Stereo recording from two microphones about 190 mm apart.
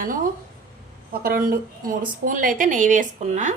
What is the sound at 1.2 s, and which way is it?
A woman's voice, 50° right (ahead or behind).